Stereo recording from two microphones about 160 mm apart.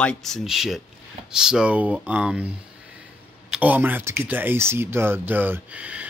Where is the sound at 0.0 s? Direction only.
5° left (ahead or behind).